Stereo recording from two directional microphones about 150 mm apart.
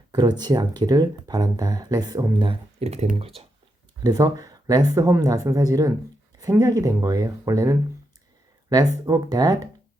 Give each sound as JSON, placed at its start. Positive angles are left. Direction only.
{"t": 0.1, "sound": "speech", "side_deg": -25}
{"t": 4.0, "sound": "speech", "side_deg": -25}